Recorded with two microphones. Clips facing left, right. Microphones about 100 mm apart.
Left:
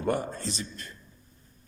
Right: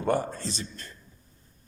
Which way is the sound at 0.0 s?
35° right (ahead or behind).